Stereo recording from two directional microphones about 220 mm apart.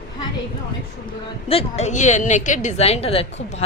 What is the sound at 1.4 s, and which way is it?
A woman's voice, 25° left (ahead or behind).